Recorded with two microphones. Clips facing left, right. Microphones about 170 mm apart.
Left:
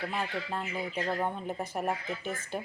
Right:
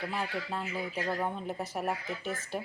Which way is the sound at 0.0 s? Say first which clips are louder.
Left 1 dB; centre (ahead or behind).